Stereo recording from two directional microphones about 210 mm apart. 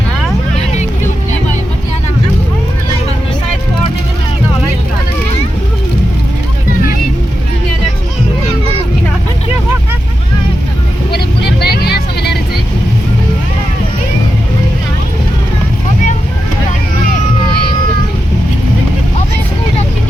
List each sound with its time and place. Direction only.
11.6 s music: 50° left (ahead or behind)